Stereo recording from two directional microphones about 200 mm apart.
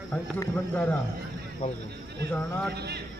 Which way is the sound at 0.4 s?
5° left (ahead or behind).